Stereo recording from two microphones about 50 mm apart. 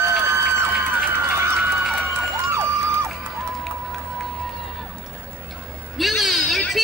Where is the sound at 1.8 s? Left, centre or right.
Centre.